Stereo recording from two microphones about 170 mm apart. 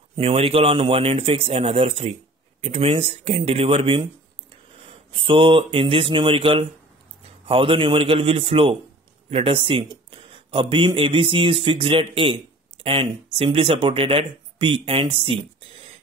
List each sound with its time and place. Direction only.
0.1 s a man's voice: 35° right (ahead or behind)